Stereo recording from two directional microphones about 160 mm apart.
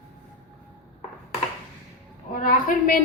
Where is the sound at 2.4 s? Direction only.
60° left (ahead or behind).